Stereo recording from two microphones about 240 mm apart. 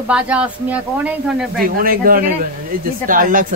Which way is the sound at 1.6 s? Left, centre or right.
Right.